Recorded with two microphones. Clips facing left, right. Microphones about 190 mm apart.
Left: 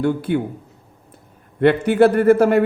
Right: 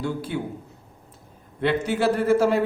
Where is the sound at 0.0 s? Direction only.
60° left (ahead or behind).